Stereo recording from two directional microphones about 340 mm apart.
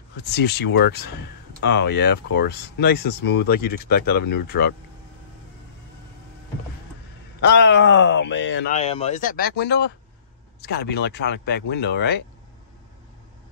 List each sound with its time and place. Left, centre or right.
0.5 s speech: left
7.4 s speech: left
8.7 s speech: centre